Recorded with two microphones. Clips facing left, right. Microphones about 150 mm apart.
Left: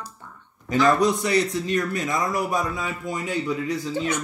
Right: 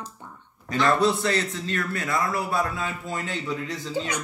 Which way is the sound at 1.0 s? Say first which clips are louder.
Left 2 dB; 15° left (ahead or behind).